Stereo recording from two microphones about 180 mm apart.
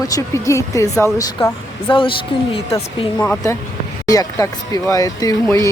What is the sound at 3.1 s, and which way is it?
Speech, 5° left (ahead or behind).